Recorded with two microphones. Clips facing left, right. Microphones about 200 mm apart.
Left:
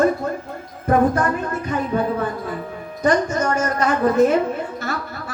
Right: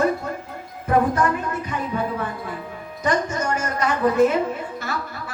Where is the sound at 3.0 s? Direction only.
45° left (ahead or behind).